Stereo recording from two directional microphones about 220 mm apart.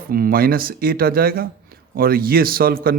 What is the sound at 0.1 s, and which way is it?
Speech, 40° right (ahead or behind).